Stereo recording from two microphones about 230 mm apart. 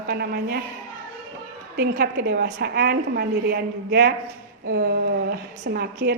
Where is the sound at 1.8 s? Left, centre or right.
Right.